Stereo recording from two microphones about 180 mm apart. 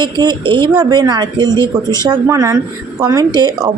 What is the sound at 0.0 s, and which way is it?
Speech, 25° right (ahead or behind).